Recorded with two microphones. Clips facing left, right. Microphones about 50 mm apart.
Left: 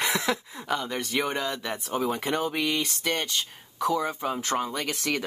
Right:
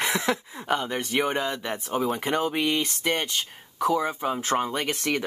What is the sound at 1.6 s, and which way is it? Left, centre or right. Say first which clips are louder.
Speech: right 2 dB; centre.